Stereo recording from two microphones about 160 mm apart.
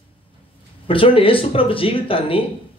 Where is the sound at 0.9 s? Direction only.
35° left (ahead or behind).